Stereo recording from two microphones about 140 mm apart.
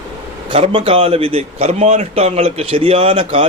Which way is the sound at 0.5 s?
40° right (ahead or behind).